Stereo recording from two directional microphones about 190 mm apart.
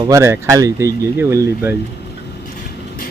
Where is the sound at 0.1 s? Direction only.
15° right (ahead or behind).